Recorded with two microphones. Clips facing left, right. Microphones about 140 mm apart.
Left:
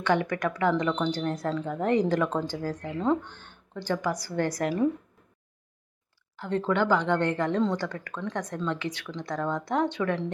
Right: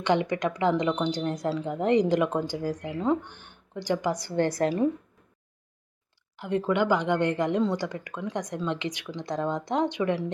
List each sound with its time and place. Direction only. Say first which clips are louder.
0.0 s a woman's voice: right 1 dB; 20° right (ahead or behind)
6.3 s a woman's voice: right 1 dB; 15° right (ahead or behind)